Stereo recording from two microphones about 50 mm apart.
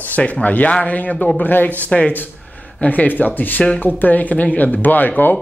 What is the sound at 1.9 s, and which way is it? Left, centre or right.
Speech, left.